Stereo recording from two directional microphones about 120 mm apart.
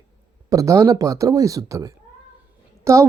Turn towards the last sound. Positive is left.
turn(degrees=-25)  # may be behind; listen again after turning